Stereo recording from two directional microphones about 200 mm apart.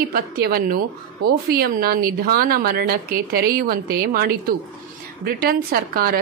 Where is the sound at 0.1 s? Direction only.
45° right (ahead or behind).